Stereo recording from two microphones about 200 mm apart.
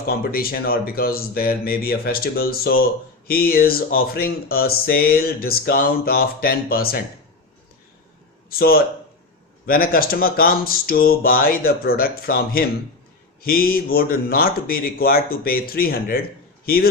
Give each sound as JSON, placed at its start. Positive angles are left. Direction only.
{"t": 0.1, "sound": "speech", "side_deg": 50}
{"t": 8.4, "sound": "speech", "side_deg": 50}